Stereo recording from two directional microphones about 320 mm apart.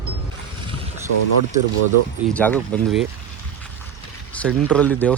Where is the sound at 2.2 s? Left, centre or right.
Centre.